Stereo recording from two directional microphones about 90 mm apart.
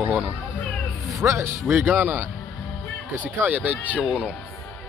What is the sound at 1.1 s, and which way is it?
Speech, 30° right (ahead or behind).